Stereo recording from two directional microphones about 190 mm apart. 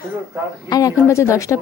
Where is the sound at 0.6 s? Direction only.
20° left (ahead or behind).